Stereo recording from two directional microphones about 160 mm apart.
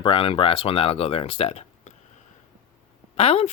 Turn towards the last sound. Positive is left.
turn(degrees=40)  # may be behind; listen again after turning